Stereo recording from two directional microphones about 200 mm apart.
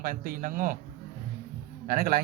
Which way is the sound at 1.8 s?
45° right (ahead or behind).